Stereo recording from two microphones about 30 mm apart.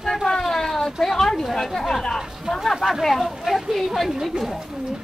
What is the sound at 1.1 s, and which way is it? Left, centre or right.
Speech, centre.